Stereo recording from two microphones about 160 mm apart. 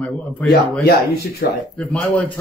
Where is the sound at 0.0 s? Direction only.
10° left (ahead or behind).